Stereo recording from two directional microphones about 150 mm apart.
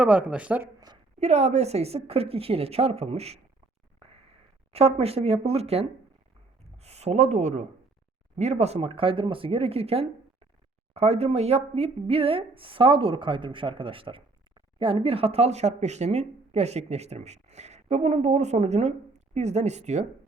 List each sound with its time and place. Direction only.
0.0 s speech: 10° right (ahead or behind)
1.2 s speech: 50° right (ahead or behind)
4.0 s a sound: 40° right (ahead or behind)
6.7 s speech: 45° right (ahead or behind)